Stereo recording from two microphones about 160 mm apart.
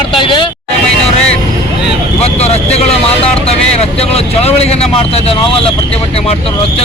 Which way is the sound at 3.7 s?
40° left (ahead or behind).